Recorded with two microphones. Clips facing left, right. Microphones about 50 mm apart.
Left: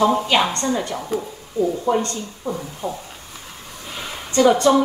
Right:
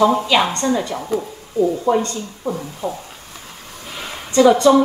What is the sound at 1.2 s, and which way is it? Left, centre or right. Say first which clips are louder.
A woman's voice: right 3 dB; centre.